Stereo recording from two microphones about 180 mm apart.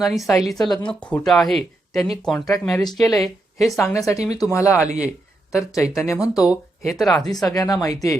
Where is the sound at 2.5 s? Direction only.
20° left (ahead or behind).